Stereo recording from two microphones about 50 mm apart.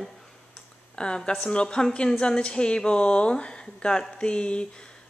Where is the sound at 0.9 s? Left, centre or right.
Centre.